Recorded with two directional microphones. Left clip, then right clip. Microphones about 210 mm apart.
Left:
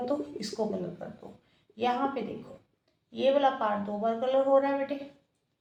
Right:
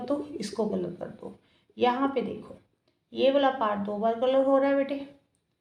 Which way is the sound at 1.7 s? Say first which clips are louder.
Right 4 dB; 40° right (ahead or behind).